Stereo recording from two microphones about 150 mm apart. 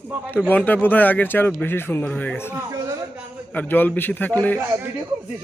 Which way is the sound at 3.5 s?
10° left (ahead or behind).